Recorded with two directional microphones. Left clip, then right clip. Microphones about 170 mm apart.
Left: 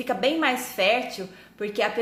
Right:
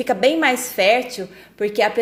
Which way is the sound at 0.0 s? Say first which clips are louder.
Right 7 dB; 35° right (ahead or behind).